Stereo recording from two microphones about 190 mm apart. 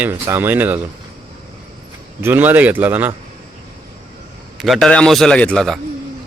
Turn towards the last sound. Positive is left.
turn(degrees=5)  # may be behind; listen again after turning